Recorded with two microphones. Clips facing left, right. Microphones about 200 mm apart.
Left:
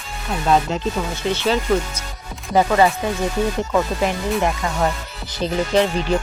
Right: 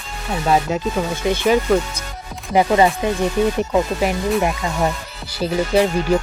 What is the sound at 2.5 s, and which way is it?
Music, 20° right (ahead or behind).